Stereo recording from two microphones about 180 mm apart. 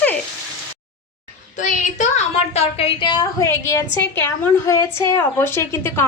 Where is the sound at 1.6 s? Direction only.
40° left (ahead or behind).